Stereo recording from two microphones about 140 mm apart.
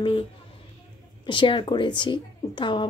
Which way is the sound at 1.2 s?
35° left (ahead or behind).